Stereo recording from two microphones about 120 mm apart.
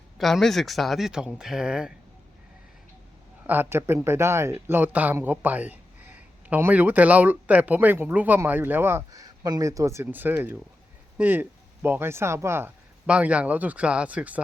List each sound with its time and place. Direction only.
0.2 s speech: centre (ahead or behind)
3.4 s speech: 15° right (ahead or behind)
9.2 s speech: 30° right (ahead or behind)
13.1 s speech: 10° right (ahead or behind)